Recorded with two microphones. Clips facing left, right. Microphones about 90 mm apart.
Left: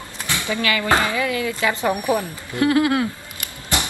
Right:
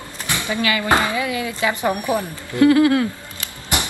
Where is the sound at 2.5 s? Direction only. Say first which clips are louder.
Right 4 dB; 25° left (ahead or behind).